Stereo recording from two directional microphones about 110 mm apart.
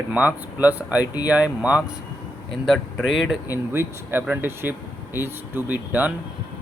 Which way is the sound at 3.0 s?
5° right (ahead or behind).